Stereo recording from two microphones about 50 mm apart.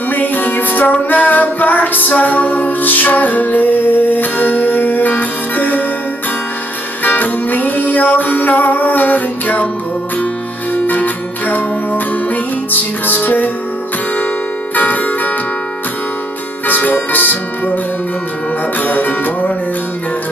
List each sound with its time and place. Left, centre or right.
0.1 s music: left
7.0 s music: left
10.7 s music: left
14.8 s music: left
16.6 s music: left
18.8 s music: left